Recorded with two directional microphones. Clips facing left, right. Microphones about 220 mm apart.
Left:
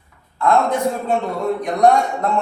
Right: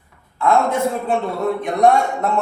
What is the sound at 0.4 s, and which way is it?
A man's voice, 5° right (ahead or behind).